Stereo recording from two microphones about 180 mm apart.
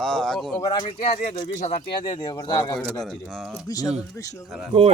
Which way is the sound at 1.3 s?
40° left (ahead or behind).